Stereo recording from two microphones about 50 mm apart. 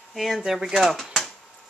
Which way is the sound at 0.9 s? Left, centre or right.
Centre.